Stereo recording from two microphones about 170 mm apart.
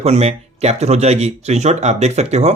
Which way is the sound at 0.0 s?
40° right (ahead or behind).